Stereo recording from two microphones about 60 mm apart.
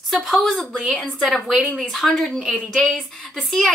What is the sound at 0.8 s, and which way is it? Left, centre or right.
A woman's voice, centre.